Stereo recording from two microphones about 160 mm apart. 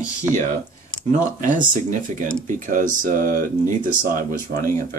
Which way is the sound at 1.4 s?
50° right (ahead or behind).